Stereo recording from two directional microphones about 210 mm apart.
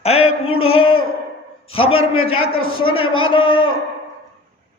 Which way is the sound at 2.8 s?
25° left (ahead or behind).